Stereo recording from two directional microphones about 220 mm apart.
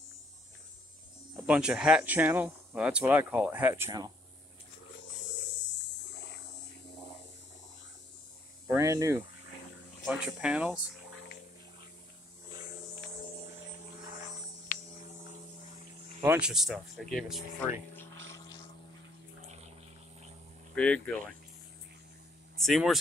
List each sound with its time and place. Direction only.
1.3 s speech: 5° right (ahead or behind)
8.7 s speech: 15° right (ahead or behind)
12.4 s mains hum: 15° right (ahead or behind)
14.7 s hum: 35° left (ahead or behind)
16.3 s speech: 5° right (ahead or behind)
20.7 s speech: 5° left (ahead or behind)
22.6 s speech: centre (ahead or behind)